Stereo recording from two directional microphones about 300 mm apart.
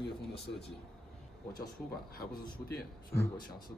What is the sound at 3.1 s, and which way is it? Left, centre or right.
Speech, centre.